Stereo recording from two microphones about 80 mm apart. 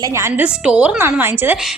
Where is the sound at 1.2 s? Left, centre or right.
Right.